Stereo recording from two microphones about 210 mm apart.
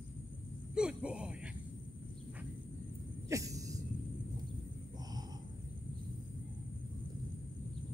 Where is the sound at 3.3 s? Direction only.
15° right (ahead or behind).